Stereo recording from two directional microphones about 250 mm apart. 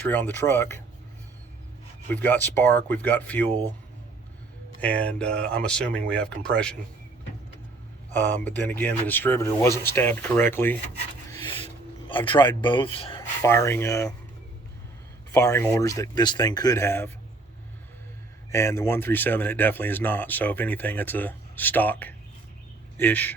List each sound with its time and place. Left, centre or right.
0.1 s speech: centre
2.0 s speech: centre
4.8 s speech: centre
8.1 s speech: centre
12.0 s speech: centre
15.3 s speech: centre
18.5 s speech: centre